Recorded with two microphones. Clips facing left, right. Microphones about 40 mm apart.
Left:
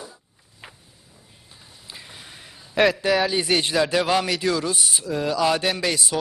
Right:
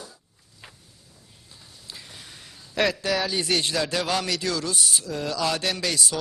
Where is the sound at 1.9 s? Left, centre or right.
Centre.